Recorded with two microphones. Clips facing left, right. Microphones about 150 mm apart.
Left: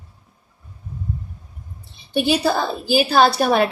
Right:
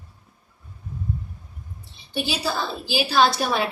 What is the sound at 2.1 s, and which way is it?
A woman's voice, 60° left (ahead or behind).